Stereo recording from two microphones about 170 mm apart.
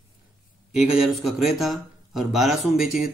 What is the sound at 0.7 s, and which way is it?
Speech, 5° right (ahead or behind).